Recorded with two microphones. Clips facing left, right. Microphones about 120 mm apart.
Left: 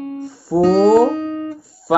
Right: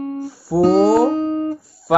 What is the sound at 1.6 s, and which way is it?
Guitar, centre (ahead or behind).